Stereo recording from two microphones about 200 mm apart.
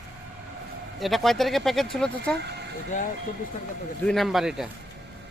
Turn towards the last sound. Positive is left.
turn(degrees=0)  # may be behind; listen again after turning